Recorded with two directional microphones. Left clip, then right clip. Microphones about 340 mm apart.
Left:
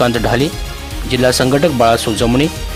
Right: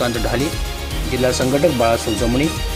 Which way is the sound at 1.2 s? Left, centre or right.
Left.